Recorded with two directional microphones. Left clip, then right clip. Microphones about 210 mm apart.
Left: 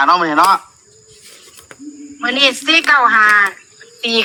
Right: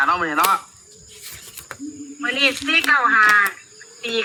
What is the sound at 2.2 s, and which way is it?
Speech, 40° left (ahead or behind).